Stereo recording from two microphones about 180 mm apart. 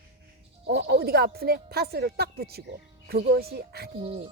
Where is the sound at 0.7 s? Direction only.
65° right (ahead or behind).